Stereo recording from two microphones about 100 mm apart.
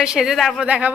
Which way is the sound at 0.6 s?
15° right (ahead or behind).